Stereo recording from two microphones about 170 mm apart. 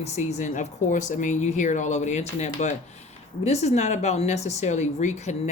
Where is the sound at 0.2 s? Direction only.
45° left (ahead or behind).